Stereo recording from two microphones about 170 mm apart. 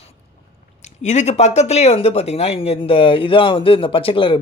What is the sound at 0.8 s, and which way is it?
Speech, 40° left (ahead or behind).